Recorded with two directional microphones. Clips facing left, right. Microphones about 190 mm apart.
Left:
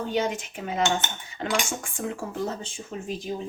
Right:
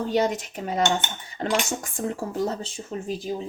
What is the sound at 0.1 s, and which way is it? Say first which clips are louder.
A woman's voice: right 4 dB; 40° right (ahead or behind).